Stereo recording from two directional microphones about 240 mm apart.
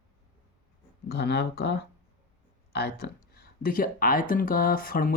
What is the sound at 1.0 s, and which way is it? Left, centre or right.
Speech, left.